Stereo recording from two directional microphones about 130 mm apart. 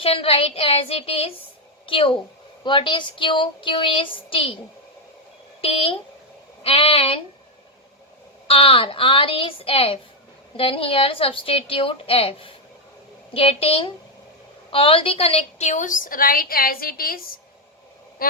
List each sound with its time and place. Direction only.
0.0 s a woman's voice: 45° left (ahead or behind)
6.6 s a woman's voice: 45° left (ahead or behind)
8.4 s a woman's voice: 45° left (ahead or behind); by 16.8 s 90° left
18.2 s a sound: 90° left